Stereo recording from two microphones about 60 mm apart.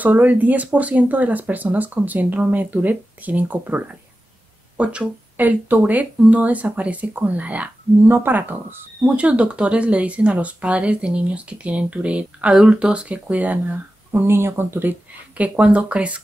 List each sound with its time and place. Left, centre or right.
0.0 s speech: right
8.1 s speech: right
9.1 s speech: right
14.2 s speech: right